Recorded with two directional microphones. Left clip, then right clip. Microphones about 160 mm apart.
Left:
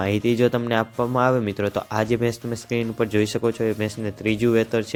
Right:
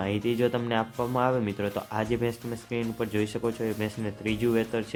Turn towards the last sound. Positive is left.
turn(degrees=25)  # may be behind; listen again after turning